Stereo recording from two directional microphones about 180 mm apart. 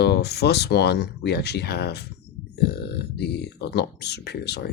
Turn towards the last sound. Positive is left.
turn(degrees=65)  # may be behind; listen again after turning